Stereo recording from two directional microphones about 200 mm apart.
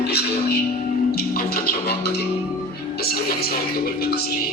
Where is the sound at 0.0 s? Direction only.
55° left (ahead or behind).